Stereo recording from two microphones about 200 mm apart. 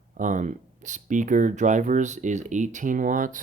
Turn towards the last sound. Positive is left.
turn(degrees=-40)  # may be behind; listen again after turning